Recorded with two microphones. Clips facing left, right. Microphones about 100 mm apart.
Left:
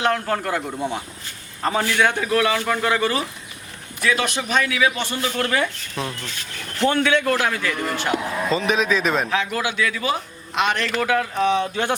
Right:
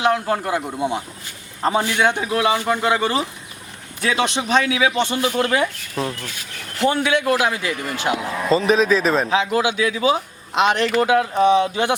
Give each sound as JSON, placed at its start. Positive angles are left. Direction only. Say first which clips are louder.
{"t": 0.0, "sound": "a man's voice", "louder": "right 2 dB", "side_deg": -15}
{"t": 8.4, "sound": "a man's voice", "louder": "right 5 dB", "side_deg": -35}
{"t": 8.7, "sound": "a man's voice", "louder": "right 4 dB", "side_deg": 0}
{"t": 9.3, "sound": "a man's voice", "louder": "right 4 dB", "side_deg": -20}